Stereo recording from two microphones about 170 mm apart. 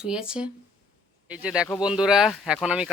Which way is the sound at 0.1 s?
5° right (ahead or behind).